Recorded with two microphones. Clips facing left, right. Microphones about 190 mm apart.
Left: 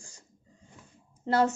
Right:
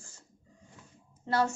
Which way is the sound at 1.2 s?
25° left (ahead or behind).